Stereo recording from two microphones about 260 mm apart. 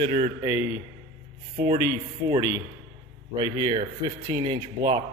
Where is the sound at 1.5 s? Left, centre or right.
Centre.